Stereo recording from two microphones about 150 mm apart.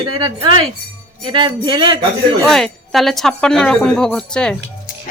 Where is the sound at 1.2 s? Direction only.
30° right (ahead or behind).